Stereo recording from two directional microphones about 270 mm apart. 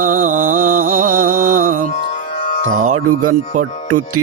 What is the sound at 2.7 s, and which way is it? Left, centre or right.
Music, right.